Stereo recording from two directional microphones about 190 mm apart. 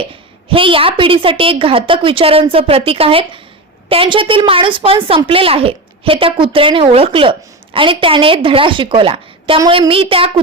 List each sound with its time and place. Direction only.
0.4 s a woman's voice: 30° right (ahead or behind)